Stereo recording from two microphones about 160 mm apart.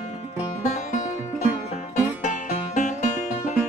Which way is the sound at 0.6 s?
50° left (ahead or behind).